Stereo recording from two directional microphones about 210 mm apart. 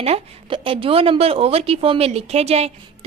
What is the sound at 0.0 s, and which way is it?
A woman's voice, 25° right (ahead or behind).